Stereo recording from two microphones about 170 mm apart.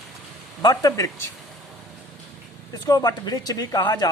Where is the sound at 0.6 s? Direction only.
20° left (ahead or behind).